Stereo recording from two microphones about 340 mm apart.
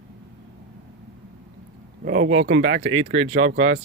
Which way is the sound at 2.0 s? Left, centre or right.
Right.